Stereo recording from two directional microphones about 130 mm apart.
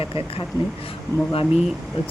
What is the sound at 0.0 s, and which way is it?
Speech, 45° left (ahead or behind).